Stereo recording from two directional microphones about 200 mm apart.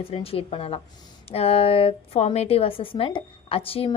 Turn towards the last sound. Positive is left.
turn(degrees=25)  # may be behind; listen again after turning